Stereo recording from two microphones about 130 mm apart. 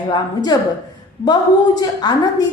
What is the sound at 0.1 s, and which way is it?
A woman's voice, 30° left (ahead or behind).